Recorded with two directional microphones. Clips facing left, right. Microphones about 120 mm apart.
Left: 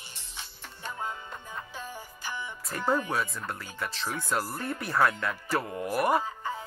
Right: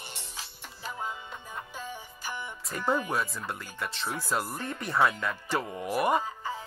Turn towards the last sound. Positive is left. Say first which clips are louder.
# left 1 dB
turn(degrees=0)  # may be behind; listen again after turning